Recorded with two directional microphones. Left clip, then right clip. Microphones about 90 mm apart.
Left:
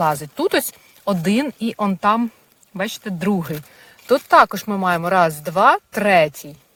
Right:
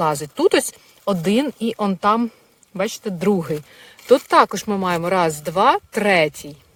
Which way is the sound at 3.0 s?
25° right (ahead or behind).